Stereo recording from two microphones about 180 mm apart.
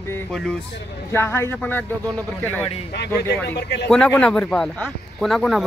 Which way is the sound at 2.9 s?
65° left (ahead or behind).